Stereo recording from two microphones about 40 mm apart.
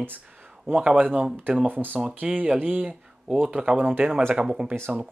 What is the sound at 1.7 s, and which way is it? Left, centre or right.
Speech, right.